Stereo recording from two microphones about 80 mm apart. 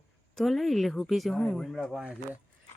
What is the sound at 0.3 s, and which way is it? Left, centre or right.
Speech, centre.